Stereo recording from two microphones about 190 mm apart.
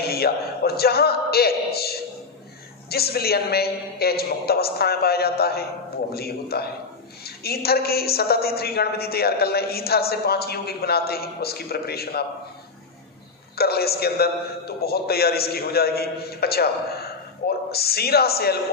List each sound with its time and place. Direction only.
0.0 s a woman's voice: 55° left (ahead or behind)
13.6 s a woman's voice: 55° left (ahead or behind)